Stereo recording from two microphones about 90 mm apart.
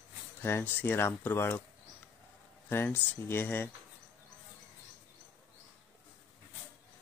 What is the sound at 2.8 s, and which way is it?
Speech, 20° left (ahead or behind).